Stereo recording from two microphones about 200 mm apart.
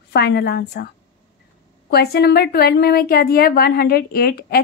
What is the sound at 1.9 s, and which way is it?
A woman's voice, 50° left (ahead or behind).